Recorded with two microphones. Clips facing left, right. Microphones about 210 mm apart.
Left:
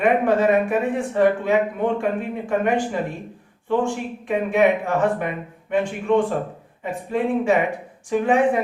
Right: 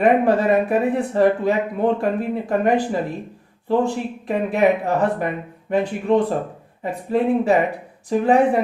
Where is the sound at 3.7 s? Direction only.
35° right (ahead or behind).